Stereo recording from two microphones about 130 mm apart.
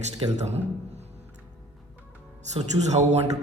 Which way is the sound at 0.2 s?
55° right (ahead or behind).